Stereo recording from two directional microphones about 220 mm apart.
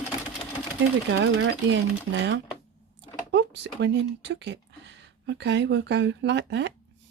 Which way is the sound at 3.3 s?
50° right (ahead or behind).